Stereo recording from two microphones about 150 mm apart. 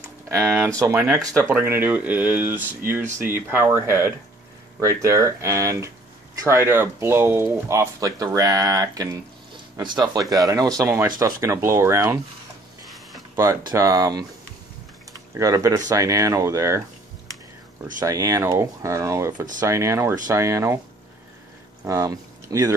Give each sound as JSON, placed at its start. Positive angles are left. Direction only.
{"t": 0.3, "sound": "speech", "side_deg": -20}
{"t": 13.7, "sound": "speech", "side_deg": -25}
{"t": 15.3, "sound": "speech", "side_deg": -20}
{"t": 18.0, "sound": "speech", "side_deg": -20}
{"t": 21.8, "sound": "speech", "side_deg": -20}